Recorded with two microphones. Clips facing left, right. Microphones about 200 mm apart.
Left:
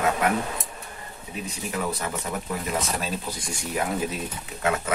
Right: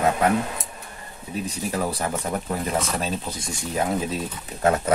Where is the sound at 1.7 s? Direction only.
35° right (ahead or behind).